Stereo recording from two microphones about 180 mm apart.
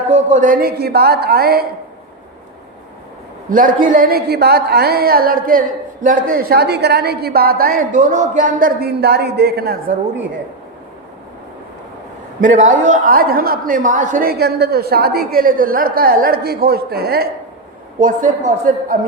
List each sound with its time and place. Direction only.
0.1 s a woman's voice: 45° right (ahead or behind); by 1.6 s 60° right (ahead or behind)
3.5 s a woman's voice: 50° right (ahead or behind)
12.4 s a woman's voice: 45° right (ahead or behind); by 17.2 s 60° right (ahead or behind)
18.0 s a man's voice: 45° right (ahead or behind)